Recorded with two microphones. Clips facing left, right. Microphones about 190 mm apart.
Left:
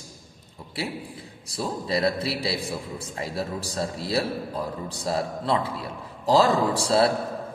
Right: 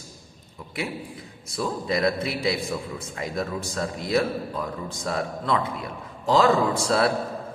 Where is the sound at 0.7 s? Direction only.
30° left (ahead or behind).